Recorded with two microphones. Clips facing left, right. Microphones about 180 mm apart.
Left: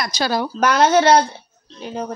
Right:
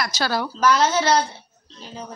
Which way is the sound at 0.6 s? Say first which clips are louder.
Left 4 dB; 60° left (ahead or behind).